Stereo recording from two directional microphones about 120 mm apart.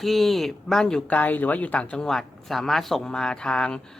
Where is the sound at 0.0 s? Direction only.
Centre (ahead or behind).